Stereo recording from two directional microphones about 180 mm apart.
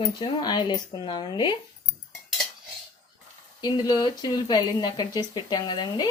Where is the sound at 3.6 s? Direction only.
25° left (ahead or behind).